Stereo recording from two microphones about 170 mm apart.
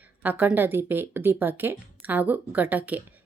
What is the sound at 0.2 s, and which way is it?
A woman's voice, 10° right (ahead or behind).